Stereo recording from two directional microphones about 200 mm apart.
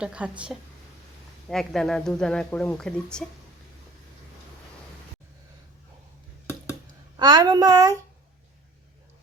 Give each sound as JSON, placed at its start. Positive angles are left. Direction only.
{"t": 0.0, "sound": "speech", "side_deg": -5}
{"t": 7.2, "sound": "a child's voice", "side_deg": -20}